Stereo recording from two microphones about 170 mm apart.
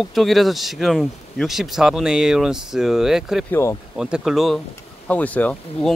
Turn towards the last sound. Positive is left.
turn(degrees=10)  # may be behind; listen again after turning